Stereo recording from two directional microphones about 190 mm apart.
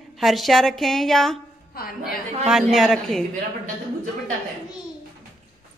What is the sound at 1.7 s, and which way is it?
Speech, 50° left (ahead or behind).